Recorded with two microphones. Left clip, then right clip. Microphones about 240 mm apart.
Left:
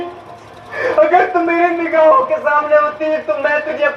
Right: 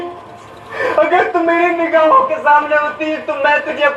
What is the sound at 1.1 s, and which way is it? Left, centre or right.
A man's voice, right.